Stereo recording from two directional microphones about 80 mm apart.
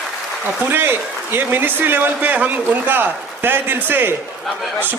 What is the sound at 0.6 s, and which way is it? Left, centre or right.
A man's voice, right.